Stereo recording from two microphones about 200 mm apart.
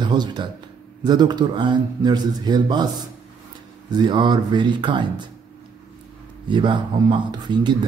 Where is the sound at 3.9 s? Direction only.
20° right (ahead or behind).